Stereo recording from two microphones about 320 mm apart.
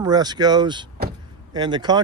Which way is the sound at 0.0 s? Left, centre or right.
Centre.